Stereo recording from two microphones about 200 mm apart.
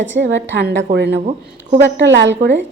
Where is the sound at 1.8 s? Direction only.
65° right (ahead or behind).